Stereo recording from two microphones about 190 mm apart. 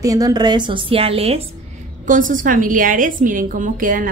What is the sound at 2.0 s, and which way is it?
A woman's voice, 45° right (ahead or behind).